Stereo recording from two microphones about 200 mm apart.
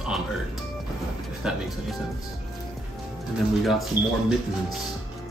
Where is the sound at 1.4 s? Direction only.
5° right (ahead or behind).